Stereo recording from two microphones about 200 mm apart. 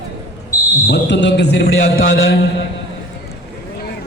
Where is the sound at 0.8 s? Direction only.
60° left (ahead or behind).